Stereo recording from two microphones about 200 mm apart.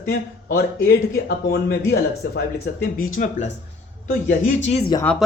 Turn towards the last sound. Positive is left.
turn(degrees=10)  # may be behind; listen again after turning